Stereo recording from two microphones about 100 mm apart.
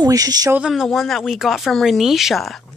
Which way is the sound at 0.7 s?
Centre (ahead or behind).